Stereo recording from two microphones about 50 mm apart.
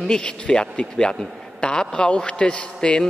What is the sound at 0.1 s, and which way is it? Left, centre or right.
A man's voice, centre.